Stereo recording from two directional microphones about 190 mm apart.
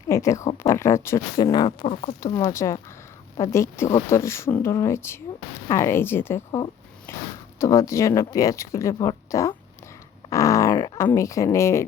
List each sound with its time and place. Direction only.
0.1 s speech: 15° left (ahead or behind)
2.2 s speech: 15° left (ahead or behind)